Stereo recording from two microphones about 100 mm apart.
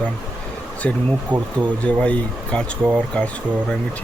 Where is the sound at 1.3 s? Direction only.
50° right (ahead or behind).